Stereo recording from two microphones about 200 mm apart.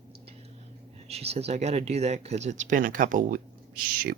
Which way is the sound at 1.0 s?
30° right (ahead or behind).